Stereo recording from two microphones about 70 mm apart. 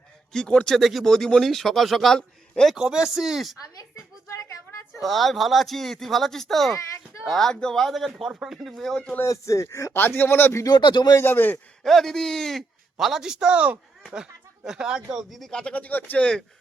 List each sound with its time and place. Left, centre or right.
0.3 s speech: centre
0.8 s a man's voice: centre
2.7 s speech: centre
4.9 s speech: centre
6.7 s a sound: left
7.3 s speech: centre
8.8 s speech: centre
9.2 s speech: left
9.9 s speech: left
10.6 s speech: left
11.1 s speech: left
11.8 s speech: centre; by 16.2 s left